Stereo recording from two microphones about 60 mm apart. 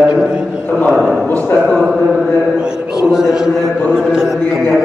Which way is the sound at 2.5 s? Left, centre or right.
Centre.